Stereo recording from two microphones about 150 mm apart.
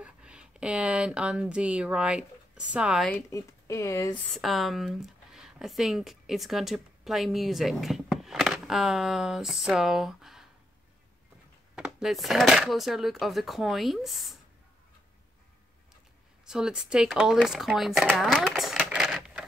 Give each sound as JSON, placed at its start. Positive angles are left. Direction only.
{"t": 0.0, "sound": "speech", "side_deg": -5}
{"t": 3.1, "sound": "speech", "side_deg": 20}
{"t": 4.3, "sound": "speech", "side_deg": 0}
{"t": 11.7, "sound": "speech", "side_deg": -5}
{"t": 16.4, "sound": "speech", "side_deg": -5}